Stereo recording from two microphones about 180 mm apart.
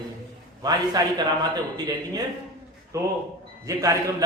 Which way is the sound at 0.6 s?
20° right (ahead or behind).